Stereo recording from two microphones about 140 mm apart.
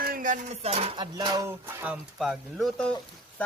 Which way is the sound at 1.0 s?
30° right (ahead or behind).